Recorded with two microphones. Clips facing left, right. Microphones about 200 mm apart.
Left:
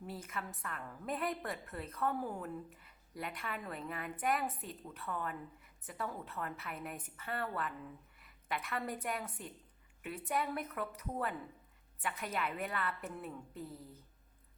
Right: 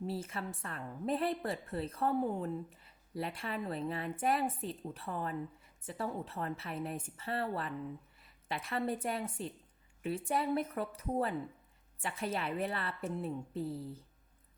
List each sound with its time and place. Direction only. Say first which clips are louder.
0.0 s a woman's voice: right 5 dB; 30° right (ahead or behind)